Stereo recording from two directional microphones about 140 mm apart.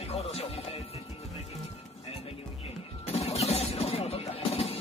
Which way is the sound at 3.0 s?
50° left (ahead or behind).